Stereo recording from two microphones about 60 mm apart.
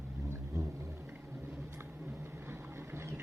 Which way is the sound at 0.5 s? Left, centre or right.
Right.